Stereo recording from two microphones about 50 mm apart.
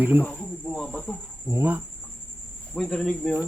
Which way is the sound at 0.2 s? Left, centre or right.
Left.